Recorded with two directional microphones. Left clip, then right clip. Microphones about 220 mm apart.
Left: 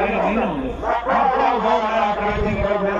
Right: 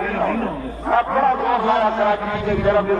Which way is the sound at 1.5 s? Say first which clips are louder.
Right 1 dB; 55° right (ahead or behind).